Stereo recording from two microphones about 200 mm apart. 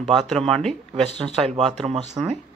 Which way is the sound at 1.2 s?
30° right (ahead or behind).